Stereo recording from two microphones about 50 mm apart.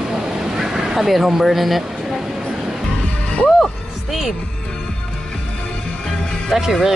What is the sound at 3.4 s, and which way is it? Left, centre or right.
Music, centre.